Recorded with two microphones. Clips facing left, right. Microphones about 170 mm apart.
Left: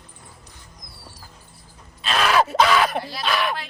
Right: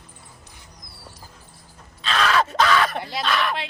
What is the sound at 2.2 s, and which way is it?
Groan, 25° left (ahead or behind).